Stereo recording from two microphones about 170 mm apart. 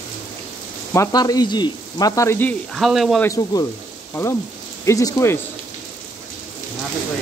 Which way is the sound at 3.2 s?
20° left (ahead or behind).